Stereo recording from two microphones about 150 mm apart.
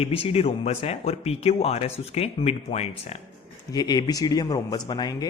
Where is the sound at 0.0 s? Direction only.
40° left (ahead or behind).